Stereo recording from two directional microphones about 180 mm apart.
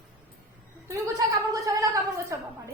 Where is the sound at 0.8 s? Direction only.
15° right (ahead or behind).